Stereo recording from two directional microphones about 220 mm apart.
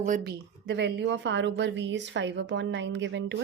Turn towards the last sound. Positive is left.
turn(degrees=-55)  # may be behind; listen again after turning